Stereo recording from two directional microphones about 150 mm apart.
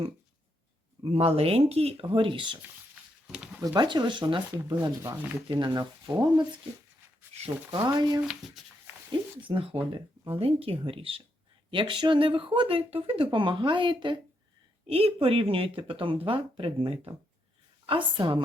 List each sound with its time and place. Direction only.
1.1 s speech: 40° right (ahead or behind)
3.2 s speech: 5° right (ahead or behind)
3.6 s speech: 25° right (ahead or behind)
7.7 s speech: 30° right (ahead or behind)
8.3 s speech: centre (ahead or behind)
9.5 s speech: 35° right (ahead or behind)